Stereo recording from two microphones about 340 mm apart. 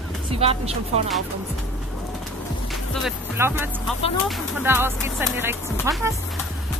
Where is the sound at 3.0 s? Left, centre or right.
Centre.